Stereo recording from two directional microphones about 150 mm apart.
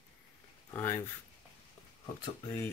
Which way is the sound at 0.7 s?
15° left (ahead or behind).